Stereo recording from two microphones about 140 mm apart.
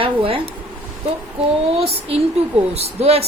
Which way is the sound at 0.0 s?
40° right (ahead or behind).